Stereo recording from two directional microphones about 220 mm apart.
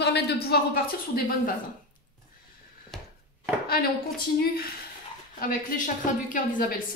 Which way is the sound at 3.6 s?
45° left (ahead or behind).